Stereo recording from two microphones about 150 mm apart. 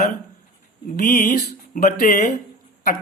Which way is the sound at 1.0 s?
65° left (ahead or behind).